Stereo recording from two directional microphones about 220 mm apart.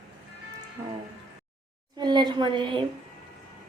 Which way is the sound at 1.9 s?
20° right (ahead or behind).